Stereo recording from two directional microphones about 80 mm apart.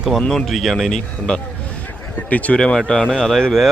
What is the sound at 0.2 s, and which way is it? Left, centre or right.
Speech, centre.